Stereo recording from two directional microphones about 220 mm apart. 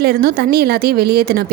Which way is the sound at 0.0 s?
45° right (ahead or behind).